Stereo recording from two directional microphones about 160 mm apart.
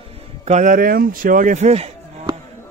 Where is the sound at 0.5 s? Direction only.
50° right (ahead or behind).